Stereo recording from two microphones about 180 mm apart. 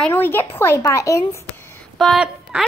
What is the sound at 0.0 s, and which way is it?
Speech, 10° left (ahead or behind).